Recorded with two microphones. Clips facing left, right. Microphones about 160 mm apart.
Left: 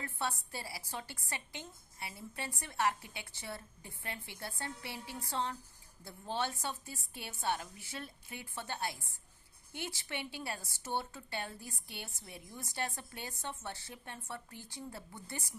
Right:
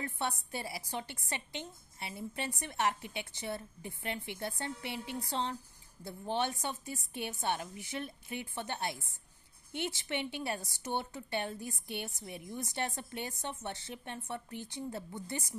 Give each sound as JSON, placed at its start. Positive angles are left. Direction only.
{"t": 0.0, "sound": "a woman's voice", "side_deg": -20}